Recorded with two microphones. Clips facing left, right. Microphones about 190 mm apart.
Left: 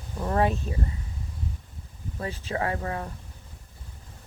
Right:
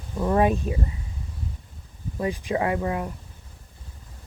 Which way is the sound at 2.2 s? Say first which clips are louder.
Right 5 dB; 15° right (ahead or behind).